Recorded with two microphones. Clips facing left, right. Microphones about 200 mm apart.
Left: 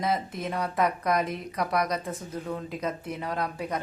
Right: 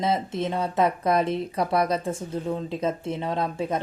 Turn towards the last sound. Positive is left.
turn(degrees=-25)  # may be behind; listen again after turning